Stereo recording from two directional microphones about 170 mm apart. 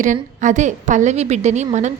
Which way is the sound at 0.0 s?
45° right (ahead or behind).